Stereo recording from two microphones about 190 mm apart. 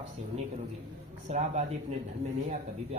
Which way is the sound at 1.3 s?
35° right (ahead or behind).